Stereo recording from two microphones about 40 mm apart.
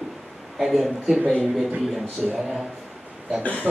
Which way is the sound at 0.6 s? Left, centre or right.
Centre.